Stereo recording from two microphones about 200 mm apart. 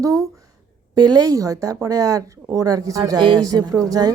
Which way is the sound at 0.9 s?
20° right (ahead or behind).